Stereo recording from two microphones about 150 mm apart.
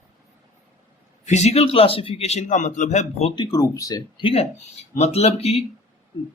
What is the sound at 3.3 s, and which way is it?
Speech, 25° left (ahead or behind).